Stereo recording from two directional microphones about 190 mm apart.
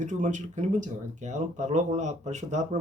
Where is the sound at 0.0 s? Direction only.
40° right (ahead or behind).